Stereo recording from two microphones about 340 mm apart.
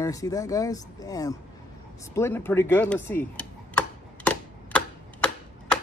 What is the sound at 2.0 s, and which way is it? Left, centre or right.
Chopping, centre.